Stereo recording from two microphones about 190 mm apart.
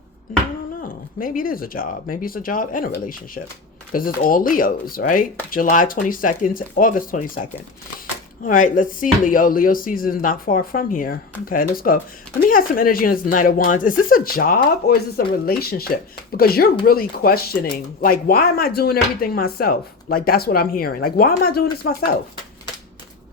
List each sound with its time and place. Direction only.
0.8 s speech: 45° left (ahead or behind)
8.4 s speech: 45° left (ahead or behind)